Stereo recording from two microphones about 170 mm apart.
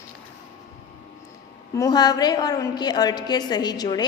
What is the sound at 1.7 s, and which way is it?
A woman's voice, 20° left (ahead or behind).